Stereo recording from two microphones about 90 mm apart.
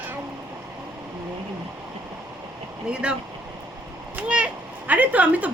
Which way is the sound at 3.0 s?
10° right (ahead or behind).